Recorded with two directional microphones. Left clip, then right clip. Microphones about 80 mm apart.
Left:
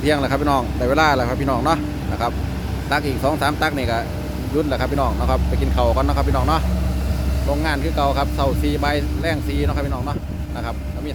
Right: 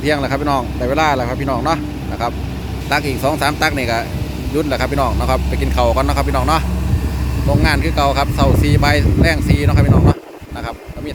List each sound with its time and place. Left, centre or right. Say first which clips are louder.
0.0 s speech: right 2 dB; centre
2.9 s speech: right 3 dB; centre
7.6 s speech: right 5 dB; centre